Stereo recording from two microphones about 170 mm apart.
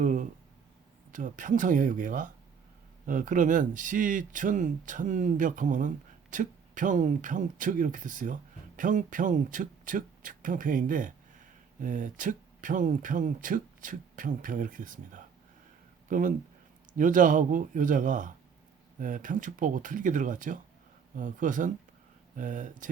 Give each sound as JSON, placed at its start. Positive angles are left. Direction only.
{"t": 0.0, "sound": "speech", "side_deg": -50}